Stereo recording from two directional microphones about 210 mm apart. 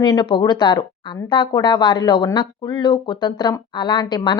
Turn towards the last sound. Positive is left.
turn(degrees=20)  # may be behind; listen again after turning